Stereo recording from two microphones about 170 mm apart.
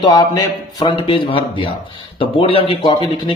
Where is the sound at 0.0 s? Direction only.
20° left (ahead or behind).